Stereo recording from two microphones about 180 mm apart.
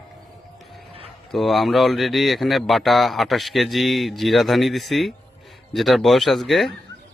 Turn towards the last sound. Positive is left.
turn(degrees=0)  # may be behind; listen again after turning